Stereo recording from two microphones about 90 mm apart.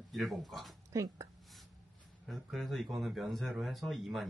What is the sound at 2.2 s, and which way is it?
Speech, centre (ahead or behind).